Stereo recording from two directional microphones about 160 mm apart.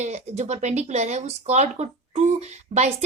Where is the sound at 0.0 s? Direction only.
45° right (ahead or behind).